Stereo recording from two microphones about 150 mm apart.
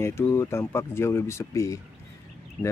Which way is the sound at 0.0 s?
15° left (ahead or behind).